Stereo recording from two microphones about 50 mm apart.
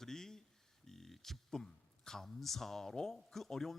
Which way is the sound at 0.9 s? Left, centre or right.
Centre.